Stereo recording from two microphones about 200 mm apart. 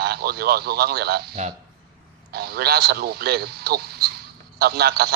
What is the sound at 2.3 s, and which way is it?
A man's voice, 50° right (ahead or behind).